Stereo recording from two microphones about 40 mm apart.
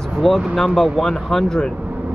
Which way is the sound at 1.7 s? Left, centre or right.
Right.